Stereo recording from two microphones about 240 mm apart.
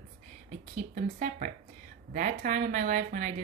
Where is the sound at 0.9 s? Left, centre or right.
Right.